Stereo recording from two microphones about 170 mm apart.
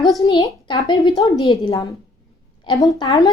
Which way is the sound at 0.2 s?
25° left (ahead or behind).